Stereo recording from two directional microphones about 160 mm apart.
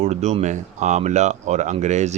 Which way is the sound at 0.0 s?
45° right (ahead or behind).